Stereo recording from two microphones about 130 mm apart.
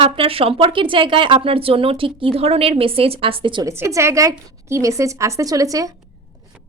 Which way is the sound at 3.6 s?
20° right (ahead or behind).